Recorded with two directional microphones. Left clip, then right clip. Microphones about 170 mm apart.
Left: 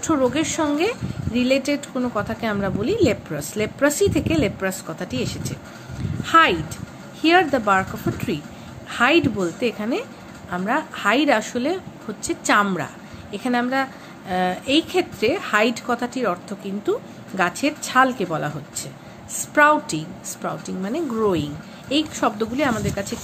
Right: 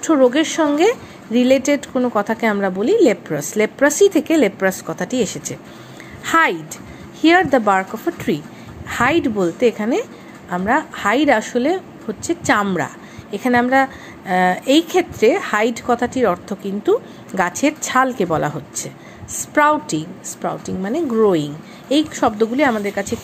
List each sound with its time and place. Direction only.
0.0 s a woman's voice: 20° right (ahead or behind)